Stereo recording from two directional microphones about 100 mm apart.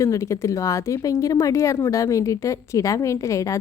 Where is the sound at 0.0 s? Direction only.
30° left (ahead or behind).